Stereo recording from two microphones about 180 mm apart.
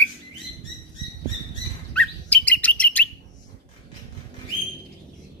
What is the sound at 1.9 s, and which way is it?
Bird, 5° left (ahead or behind).